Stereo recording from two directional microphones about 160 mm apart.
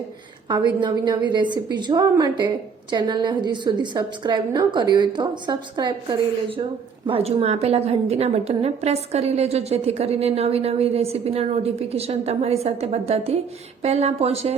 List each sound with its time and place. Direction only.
0.4 s a woman's voice: 25° right (ahead or behind)